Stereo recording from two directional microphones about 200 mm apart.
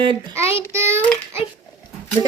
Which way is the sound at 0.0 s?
25° right (ahead or behind).